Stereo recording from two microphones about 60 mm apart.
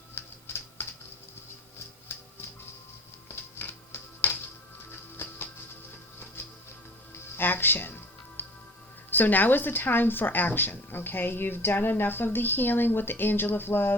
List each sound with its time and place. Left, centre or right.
0.1 s a sound: left
2.1 s music: left
7.3 s speech: left
8.4 s music: left
9.0 s a woman's voice: left